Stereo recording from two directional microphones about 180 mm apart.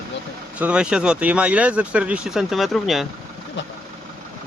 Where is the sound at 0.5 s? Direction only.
5° right (ahead or behind).